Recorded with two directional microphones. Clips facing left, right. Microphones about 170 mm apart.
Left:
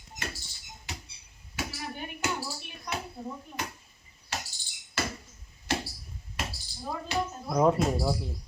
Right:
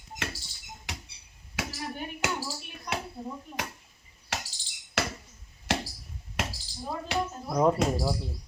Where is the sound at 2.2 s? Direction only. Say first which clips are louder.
Even; 90° right.